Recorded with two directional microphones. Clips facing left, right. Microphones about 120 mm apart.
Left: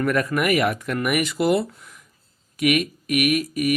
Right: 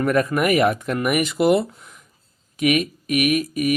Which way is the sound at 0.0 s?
25° right (ahead or behind).